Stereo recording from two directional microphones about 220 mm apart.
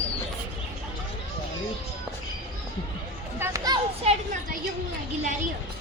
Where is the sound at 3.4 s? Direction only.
15° right (ahead or behind).